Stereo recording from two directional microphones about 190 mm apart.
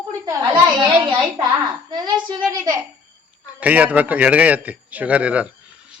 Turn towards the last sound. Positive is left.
turn(degrees=-5)  # may be behind; listen again after turning